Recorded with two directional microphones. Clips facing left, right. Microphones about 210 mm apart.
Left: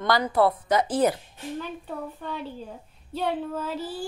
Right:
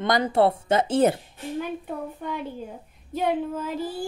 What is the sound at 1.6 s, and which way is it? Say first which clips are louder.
A woman's voice: right 3 dB; 15° right (ahead or behind).